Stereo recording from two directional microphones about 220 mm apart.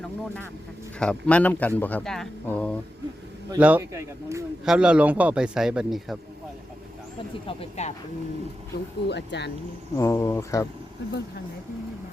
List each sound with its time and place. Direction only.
0.9 s speech: 5° left (ahead or behind)
3.5 s a man's voice: 10° right (ahead or behind)
7.4 s speech: 30° left (ahead or behind)
8.7 s speech: 50° left (ahead or behind)
10.0 s speech: 15° left (ahead or behind)